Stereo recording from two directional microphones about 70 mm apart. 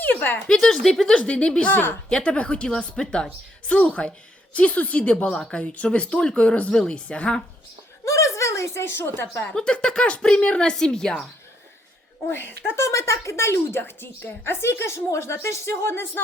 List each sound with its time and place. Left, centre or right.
0.0 s a sound: left
0.3 s a woman's voice: centre
8.0 s speech: left
9.6 s speech: centre
12.3 s speech: left